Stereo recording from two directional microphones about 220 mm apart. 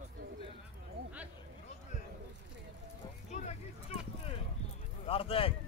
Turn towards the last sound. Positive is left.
turn(degrees=25)  # may be behind; listen again after turning